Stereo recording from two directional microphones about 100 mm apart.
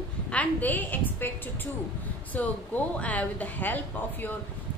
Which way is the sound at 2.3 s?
15° left (ahead or behind).